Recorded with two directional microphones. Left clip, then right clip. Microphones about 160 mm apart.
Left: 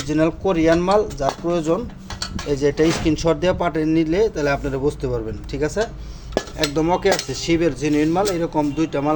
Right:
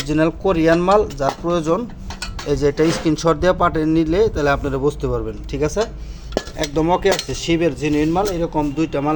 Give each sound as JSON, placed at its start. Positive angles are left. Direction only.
{"t": 0.1, "sound": "speech", "side_deg": -20}